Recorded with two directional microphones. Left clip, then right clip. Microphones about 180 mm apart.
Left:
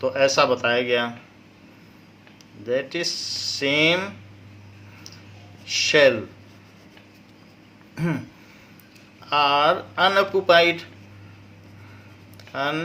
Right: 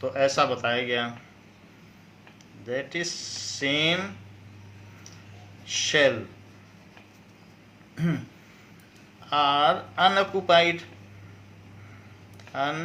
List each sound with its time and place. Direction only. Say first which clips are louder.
0.0 s speech: left 4 dB; 45° left (ahead or behind)
2.6 s speech: left 6 dB; 50° left (ahead or behind)
5.6 s speech: left 5 dB; 50° left (ahead or behind)
9.2 s speech: left 3 dB; 45° left (ahead or behind)
12.5 s speech: left 3 dB; 50° left (ahead or behind)